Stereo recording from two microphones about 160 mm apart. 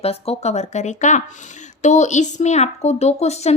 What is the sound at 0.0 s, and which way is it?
Speech, 40° left (ahead or behind).